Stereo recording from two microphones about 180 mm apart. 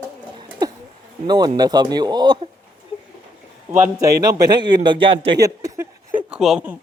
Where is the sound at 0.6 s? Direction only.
20° right (ahead or behind).